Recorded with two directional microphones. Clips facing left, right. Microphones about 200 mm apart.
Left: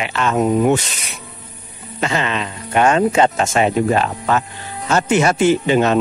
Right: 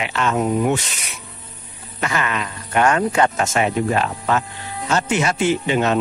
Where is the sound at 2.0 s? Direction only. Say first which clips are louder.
Left 3 dB; 25° left (ahead or behind).